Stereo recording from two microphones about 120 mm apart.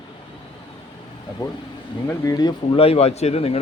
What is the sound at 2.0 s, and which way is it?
Speech, 25° left (ahead or behind).